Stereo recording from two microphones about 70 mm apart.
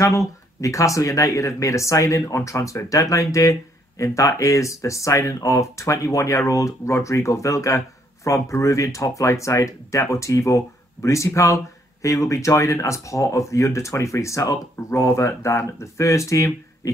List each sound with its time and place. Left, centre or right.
0.0 s speech: left